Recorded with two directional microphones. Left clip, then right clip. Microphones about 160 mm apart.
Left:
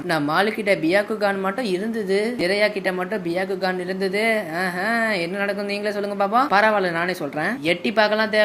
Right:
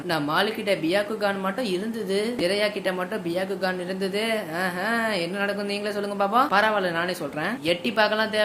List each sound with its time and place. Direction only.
0.1 s speech: 30° left (ahead or behind)
4.0 s speech: 20° left (ahead or behind)
6.1 s speech: 20° left (ahead or behind)